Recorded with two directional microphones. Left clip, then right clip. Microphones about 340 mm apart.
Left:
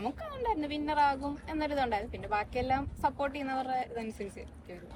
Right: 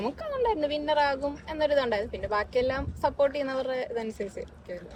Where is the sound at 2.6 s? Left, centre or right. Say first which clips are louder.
Right 3 dB; centre.